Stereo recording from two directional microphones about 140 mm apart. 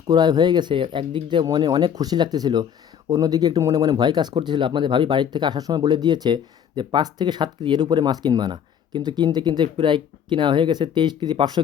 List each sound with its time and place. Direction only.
0.1 s speech: 30° right (ahead or behind)